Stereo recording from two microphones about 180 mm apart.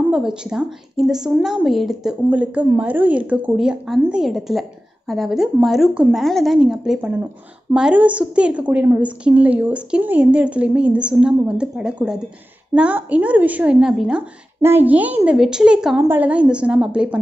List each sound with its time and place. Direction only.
0.1 s a woman's voice: 5° right (ahead or behind)